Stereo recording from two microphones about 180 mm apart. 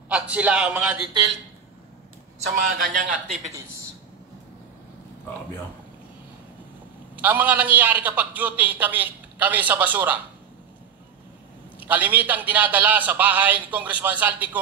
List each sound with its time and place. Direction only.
0.1 s a man's voice: 5° right (ahead or behind)
2.5 s a man's voice: 50° right (ahead or behind)
7.2 s a man's voice: 10° right (ahead or behind)
11.8 s a man's voice: 10° right (ahead or behind)